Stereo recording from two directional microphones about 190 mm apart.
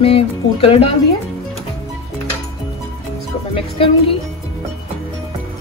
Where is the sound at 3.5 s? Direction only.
30° left (ahead or behind).